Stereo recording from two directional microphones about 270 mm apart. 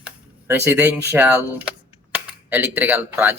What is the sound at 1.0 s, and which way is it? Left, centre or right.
Speech, centre.